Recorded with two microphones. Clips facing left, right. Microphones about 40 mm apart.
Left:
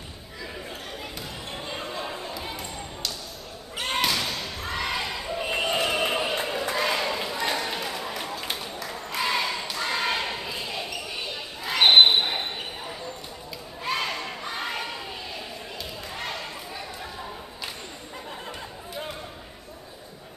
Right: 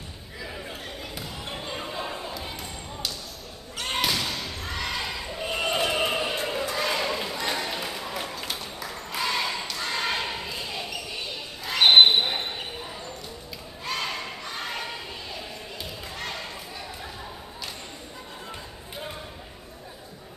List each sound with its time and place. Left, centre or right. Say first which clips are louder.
0.4 s basketball bounce: even; centre
3.7 s slam: left 2 dB; centre
4.0 s basketball bounce: even; centre
5.6 s a sound: right 1 dB; centre
6.7 s basketball bounce: left 3 dB; centre
13.8 s crowd: left 2 dB; centre
16.1 s basketball bounce: left 2 dB; centre